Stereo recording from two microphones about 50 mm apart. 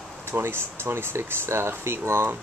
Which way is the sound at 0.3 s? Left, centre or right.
Right.